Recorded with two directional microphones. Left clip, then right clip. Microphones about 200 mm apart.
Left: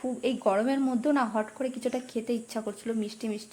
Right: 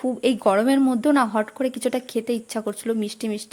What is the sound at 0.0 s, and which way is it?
A woman's voice, 40° right (ahead or behind).